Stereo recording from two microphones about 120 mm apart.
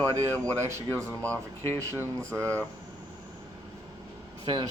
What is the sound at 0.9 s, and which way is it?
Speech, 10° left (ahead or behind).